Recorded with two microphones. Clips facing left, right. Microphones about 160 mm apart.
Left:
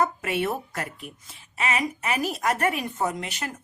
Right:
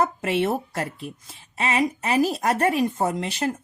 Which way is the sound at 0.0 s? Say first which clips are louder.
Right 3 dB; 25° right (ahead or behind).